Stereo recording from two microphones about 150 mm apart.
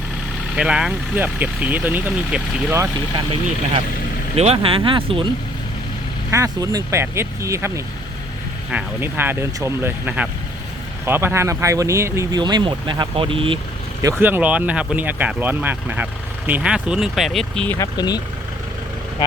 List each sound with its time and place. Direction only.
0.5 s speech: 5° right (ahead or behind)
4.4 s speech: 40° right (ahead or behind)
6.3 s speech: 20° right (ahead or behind)
8.7 s speech: 15° right (ahead or behind); by 13.6 s 35° right (ahead or behind)
14.0 s speech: 20° right (ahead or behind); by 17.7 s 5° left (ahead or behind)
17.7 s speech: 25° left (ahead or behind)